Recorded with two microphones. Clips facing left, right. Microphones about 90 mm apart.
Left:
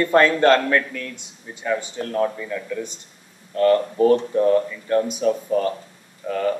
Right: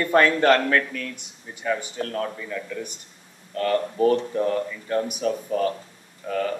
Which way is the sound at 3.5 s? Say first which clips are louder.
Left 5 dB; 5° left (ahead or behind).